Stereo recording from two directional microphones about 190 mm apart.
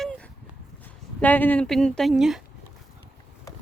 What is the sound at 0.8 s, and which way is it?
Speech, 10° left (ahead or behind).